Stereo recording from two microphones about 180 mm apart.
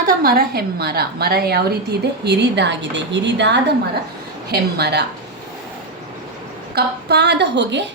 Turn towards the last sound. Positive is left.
turn(degrees=-75)  # may be behind; listen again after turning